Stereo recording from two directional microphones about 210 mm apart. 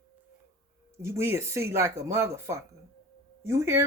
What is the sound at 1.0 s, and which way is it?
A woman's voice, 10° right (ahead or behind).